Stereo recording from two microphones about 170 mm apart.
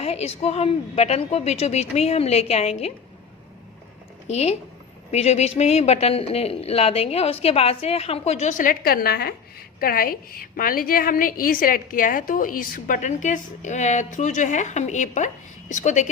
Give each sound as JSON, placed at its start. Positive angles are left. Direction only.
{"t": 0.0, "sound": "speech", "side_deg": 35}
{"t": 4.3, "sound": "a woman's voice", "side_deg": 40}